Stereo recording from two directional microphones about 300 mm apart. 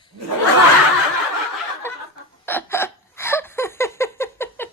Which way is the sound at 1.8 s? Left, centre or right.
Centre.